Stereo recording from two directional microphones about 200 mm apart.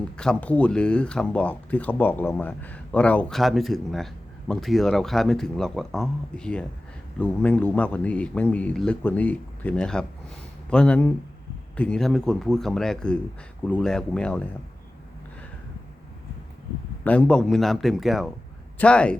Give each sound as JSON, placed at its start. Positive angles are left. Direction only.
{"t": 0.2, "sound": "speech", "side_deg": 5}
{"t": 17.0, "sound": "speech", "side_deg": 5}